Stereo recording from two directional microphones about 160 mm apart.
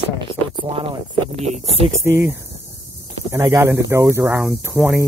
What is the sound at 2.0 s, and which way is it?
Speech, 15° right (ahead or behind).